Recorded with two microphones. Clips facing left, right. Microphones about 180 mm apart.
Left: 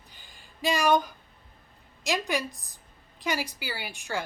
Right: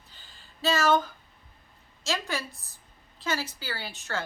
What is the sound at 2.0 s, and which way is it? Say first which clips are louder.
A woman's voice: left 3 dB; 15° left (ahead or behind).